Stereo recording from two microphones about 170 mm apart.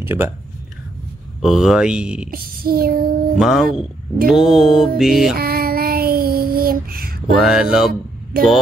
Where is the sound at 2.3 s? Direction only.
60° right (ahead or behind).